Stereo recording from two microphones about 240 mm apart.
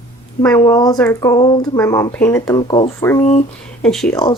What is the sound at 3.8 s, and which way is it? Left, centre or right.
Speech, centre.